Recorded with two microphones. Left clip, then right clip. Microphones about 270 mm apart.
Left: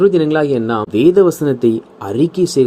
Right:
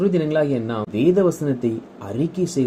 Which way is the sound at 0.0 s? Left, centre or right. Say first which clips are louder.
Left 7 dB; left.